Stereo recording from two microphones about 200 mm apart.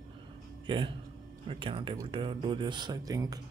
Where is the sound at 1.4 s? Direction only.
25° right (ahead or behind).